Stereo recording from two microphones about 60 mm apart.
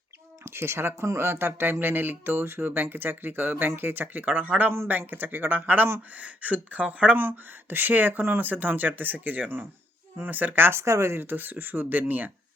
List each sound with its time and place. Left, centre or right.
0.4 s speech: right
7.2 s speech: right
10.8 s speech: right
11.2 s speech: right